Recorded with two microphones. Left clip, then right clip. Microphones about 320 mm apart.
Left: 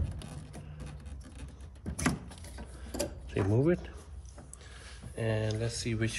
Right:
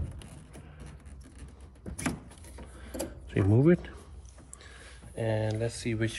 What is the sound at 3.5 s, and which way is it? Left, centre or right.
Speech, right.